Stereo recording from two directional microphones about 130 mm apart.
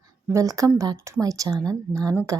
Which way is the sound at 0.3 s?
25° right (ahead or behind).